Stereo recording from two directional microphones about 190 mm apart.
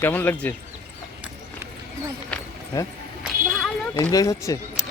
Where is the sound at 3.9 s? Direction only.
20° left (ahead or behind).